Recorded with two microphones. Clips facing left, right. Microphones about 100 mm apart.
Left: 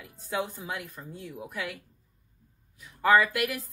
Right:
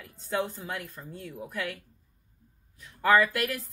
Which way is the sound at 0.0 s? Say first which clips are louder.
Right 1 dB; 15° left (ahead or behind).